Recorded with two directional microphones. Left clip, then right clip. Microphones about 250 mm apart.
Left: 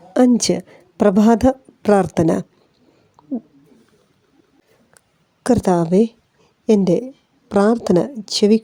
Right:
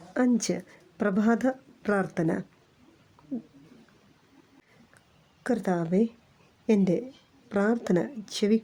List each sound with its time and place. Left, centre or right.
0.1 s a woman's voice: left
5.4 s a woman's voice: left